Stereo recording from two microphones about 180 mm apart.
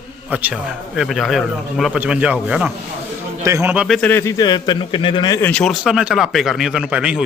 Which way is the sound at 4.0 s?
10° left (ahead or behind).